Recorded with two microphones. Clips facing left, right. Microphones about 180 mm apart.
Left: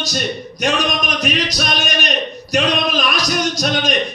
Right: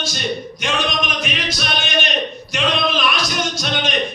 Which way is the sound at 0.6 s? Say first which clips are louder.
Left 4 dB; 40° left (ahead or behind).